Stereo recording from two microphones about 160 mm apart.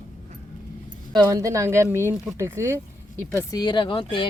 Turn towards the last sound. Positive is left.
turn(degrees=30)  # may be behind; listen again after turning